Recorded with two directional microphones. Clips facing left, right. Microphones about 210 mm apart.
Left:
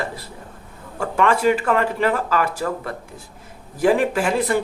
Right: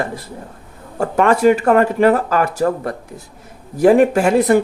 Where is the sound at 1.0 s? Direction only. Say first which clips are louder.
Right 5 dB; 40° right (ahead or behind).